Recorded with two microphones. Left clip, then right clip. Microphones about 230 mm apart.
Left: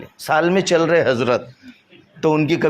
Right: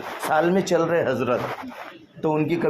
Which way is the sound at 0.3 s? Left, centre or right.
Left.